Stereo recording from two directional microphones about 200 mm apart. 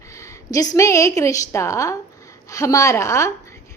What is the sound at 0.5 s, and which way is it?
A woman's voice, 20° left (ahead or behind).